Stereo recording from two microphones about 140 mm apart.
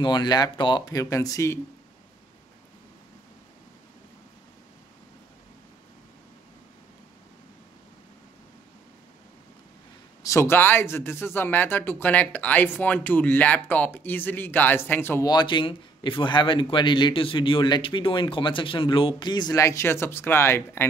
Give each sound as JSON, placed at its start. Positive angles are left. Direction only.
{"t": 0.0, "sound": "speech", "side_deg": 30}
{"t": 10.2, "sound": "speech", "side_deg": 20}
{"t": 15.2, "sound": "speech", "side_deg": 30}